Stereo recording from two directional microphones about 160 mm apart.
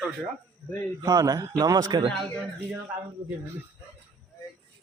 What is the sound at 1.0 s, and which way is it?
A man's voice, 20° right (ahead or behind).